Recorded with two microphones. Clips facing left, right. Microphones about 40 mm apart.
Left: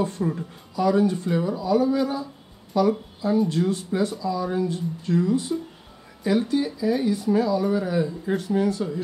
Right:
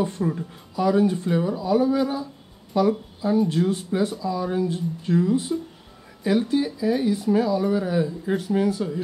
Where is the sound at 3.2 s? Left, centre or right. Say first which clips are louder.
Right 2 dB; centre.